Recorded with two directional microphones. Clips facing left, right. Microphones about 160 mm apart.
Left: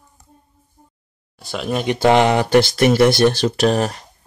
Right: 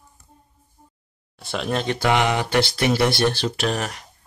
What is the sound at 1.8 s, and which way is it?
Speech, 15° left (ahead or behind).